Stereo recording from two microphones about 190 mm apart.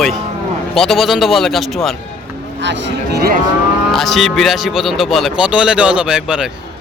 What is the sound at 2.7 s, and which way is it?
Speech, 55° right (ahead or behind).